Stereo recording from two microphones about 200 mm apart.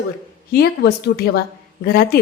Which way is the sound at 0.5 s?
50° left (ahead or behind).